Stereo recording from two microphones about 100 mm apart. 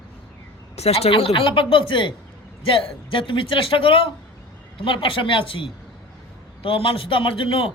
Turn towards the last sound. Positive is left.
turn(degrees=60)  # may be behind; listen again after turning